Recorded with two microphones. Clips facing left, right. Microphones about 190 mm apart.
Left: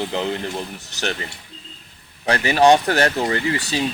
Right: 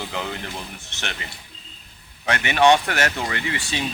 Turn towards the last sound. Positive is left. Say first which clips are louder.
# left 6 dB
turn(degrees=35)  # may be behind; listen again after turning